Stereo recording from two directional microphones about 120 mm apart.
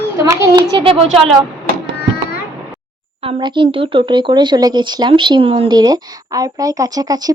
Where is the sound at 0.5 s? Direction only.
50° right (ahead or behind).